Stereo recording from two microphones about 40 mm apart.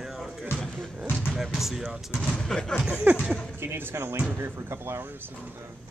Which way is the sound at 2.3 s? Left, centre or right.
Centre.